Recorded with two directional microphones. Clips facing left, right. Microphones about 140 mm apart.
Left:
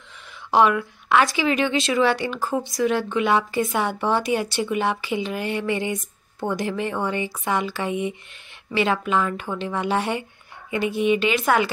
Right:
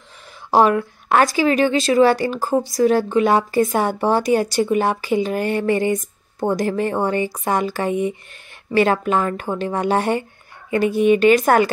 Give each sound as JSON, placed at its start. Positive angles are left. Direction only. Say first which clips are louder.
{"t": 0.5, "sound": "speech", "louder": "right 3 dB", "side_deg": -40}